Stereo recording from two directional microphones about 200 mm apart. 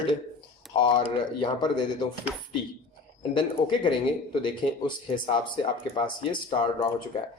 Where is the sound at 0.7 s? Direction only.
25° left (ahead or behind).